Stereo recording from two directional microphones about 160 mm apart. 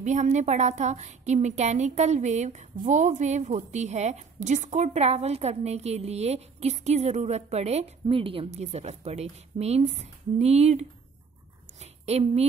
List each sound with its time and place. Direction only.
0.0 s a woman's voice: 50° right (ahead or behind)